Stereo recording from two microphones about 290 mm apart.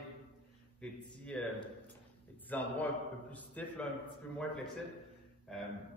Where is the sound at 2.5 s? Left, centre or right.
Centre.